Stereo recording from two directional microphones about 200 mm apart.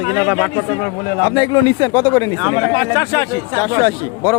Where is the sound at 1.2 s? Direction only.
20° left (ahead or behind).